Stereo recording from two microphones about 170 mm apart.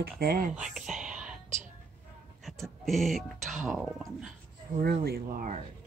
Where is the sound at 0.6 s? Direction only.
5° right (ahead or behind).